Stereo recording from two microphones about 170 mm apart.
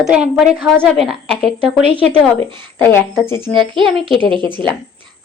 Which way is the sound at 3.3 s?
15° left (ahead or behind).